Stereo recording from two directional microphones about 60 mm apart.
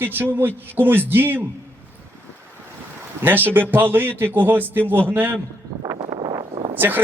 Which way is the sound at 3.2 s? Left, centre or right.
Right.